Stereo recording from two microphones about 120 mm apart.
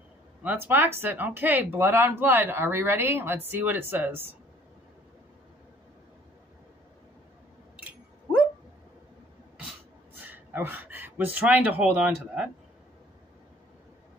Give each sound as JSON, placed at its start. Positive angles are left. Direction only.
{"t": 0.4, "sound": "speech", "side_deg": -15}
{"t": 10.1, "sound": "a sound", "side_deg": -15}
{"t": 11.8, "sound": "speech", "side_deg": -10}